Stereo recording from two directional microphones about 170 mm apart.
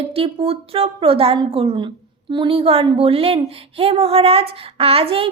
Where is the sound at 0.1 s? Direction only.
35° right (ahead or behind).